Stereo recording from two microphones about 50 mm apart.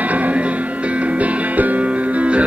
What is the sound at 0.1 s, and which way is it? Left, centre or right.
Music, right.